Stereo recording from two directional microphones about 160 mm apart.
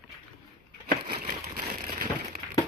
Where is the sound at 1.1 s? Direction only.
65° right (ahead or behind).